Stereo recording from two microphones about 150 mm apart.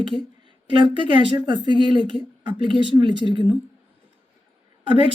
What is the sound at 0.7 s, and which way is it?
Speech, 30° right (ahead or behind).